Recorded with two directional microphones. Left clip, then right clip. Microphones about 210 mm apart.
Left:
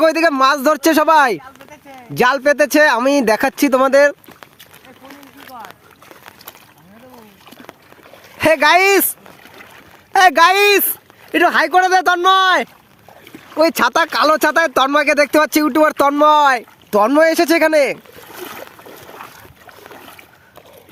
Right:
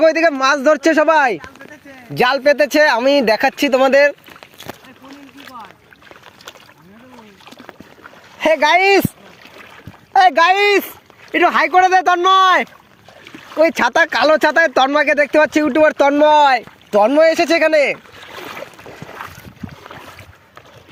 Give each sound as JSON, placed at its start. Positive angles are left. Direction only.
{"t": 0.0, "sound": "speech", "side_deg": 10}
{"t": 8.4, "sound": "speech", "side_deg": 25}
{"t": 10.1, "sound": "speech", "side_deg": 35}
{"t": 13.2, "sound": "a sound", "side_deg": -50}
{"t": 13.6, "sound": "speech", "side_deg": 5}